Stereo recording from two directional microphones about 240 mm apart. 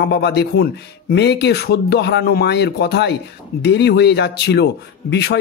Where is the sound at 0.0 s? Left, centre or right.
Left.